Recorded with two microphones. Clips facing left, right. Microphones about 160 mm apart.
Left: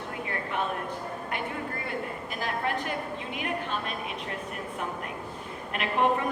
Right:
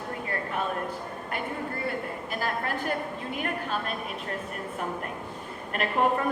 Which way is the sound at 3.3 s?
45° right (ahead or behind).